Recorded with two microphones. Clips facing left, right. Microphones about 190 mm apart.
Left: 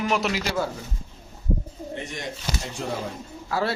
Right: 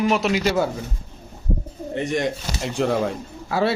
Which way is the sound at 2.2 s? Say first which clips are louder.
Right 8 dB; 70° right (ahead or behind).